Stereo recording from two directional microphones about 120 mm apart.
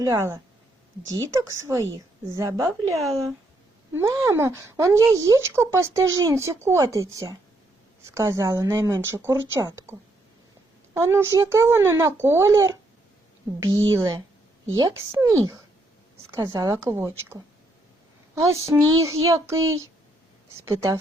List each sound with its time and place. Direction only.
0.0 s speech: 25° right (ahead or behind)
3.0 s speech: centre (ahead or behind)
3.9 s speech: 25° right (ahead or behind)
10.9 s a woman's voice: 20° right (ahead or behind)
14.9 s speech: 20° right (ahead or behind)